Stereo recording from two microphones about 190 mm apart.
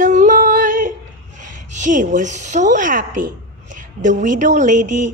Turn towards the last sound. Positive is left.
turn(degrees=-45)  # may be behind; listen again after turning